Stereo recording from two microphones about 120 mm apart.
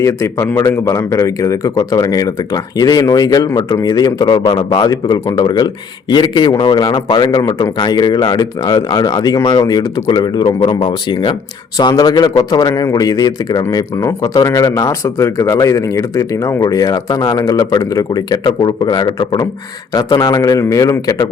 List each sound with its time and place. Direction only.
0.0 s speech: 25° left (ahead or behind)